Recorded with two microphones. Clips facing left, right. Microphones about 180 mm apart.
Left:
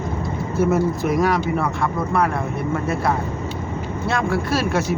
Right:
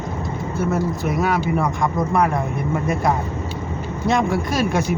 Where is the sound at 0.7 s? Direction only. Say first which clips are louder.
Left 2 dB; centre (ahead or behind).